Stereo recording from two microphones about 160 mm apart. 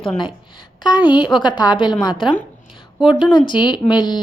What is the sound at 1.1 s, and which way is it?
A woman's voice, 30° left (ahead or behind).